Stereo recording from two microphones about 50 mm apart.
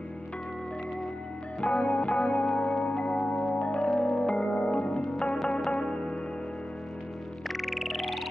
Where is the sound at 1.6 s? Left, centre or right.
Left.